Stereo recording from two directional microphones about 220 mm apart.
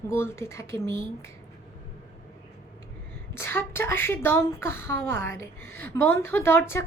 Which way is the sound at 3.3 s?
10° left (ahead or behind).